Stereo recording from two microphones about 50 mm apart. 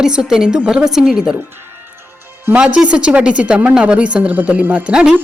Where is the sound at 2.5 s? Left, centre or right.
Right.